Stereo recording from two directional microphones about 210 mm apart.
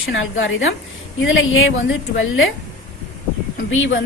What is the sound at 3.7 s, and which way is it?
Speech, 65° left (ahead or behind).